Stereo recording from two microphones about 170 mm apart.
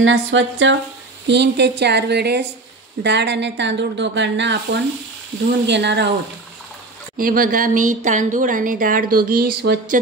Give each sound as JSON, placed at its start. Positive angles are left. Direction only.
{"t": 0.1, "sound": "speech", "side_deg": -90}
{"t": 3.0, "sound": "speech", "side_deg": -90}
{"t": 5.7, "sound": "speech", "side_deg": -90}
{"t": 7.2, "sound": "speech", "side_deg": -55}